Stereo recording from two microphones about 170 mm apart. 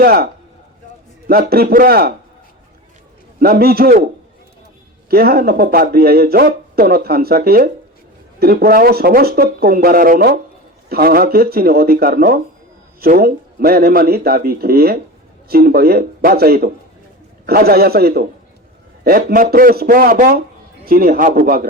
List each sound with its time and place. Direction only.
0.0 s speech: 65° right (ahead or behind)
1.3 s speech: 60° right (ahead or behind)
3.4 s speech: 60° right (ahead or behind)